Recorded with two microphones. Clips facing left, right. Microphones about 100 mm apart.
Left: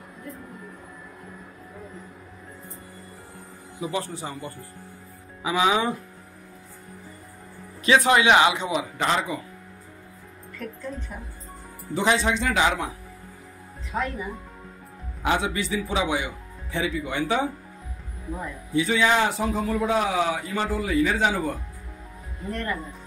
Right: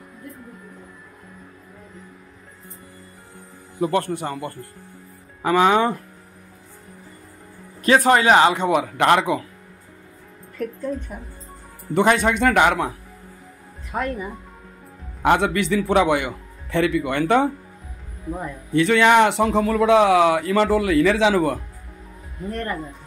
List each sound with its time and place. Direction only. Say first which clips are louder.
3.8 s speech: right 8 dB; 60° right (ahead or behind)
7.8 s speech: right 3 dB; 45° right (ahead or behind); by 9.4 s 70° right (ahead or behind)
11.9 s speech: right 5 dB; 55° right (ahead or behind)
15.2 s speech: right 7 dB; 65° right (ahead or behind)
18.8 s speech: right 6 dB; 70° right (ahead or behind); by 21.5 s 90° right
22.5 s speech: right 2 dB; 45° right (ahead or behind)